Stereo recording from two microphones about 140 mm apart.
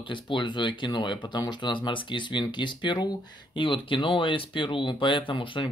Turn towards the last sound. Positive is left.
turn(degrees=35)  # may be behind; listen again after turning